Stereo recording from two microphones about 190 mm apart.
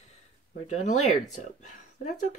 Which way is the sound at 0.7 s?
35° left (ahead or behind).